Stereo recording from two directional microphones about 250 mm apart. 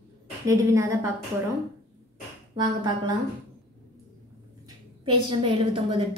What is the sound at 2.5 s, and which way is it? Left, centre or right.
Speech, centre.